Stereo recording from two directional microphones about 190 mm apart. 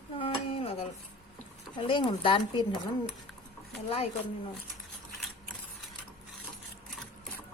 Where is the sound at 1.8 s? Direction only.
25° left (ahead or behind).